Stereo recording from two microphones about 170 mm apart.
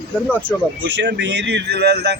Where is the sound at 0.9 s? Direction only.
90° right.